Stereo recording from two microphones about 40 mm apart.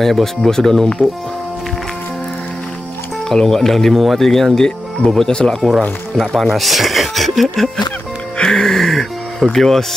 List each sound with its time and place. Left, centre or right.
0.0 s speech: centre
3.3 s speech: centre
6.3 s speech: centre
8.4 s speech: centre